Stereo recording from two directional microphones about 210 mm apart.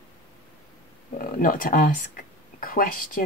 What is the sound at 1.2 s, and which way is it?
Speech, 40° left (ahead or behind).